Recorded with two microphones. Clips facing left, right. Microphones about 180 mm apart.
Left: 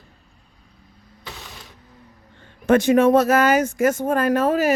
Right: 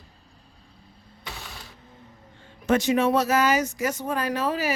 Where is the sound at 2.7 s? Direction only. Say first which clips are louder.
Left 6 dB; 55° left (ahead or behind).